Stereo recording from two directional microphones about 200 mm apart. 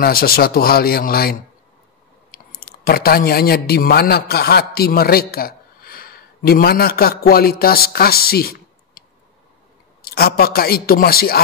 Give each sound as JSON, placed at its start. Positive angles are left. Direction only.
{"t": 0.0, "sound": "a man's voice", "side_deg": 50}
{"t": 10.0, "sound": "speech", "side_deg": 50}